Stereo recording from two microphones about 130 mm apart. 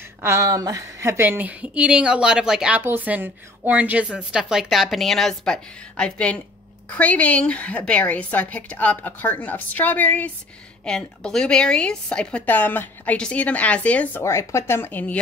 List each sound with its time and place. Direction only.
0.2 s a woman's voice: 20° right (ahead or behind); by 2.8 s 5° right (ahead or behind)
2.8 s a woman's voice: 15° right (ahead or behind); by 14.2 s 10° left (ahead or behind)
14.2 s a woman's voice: 20° left (ahead or behind)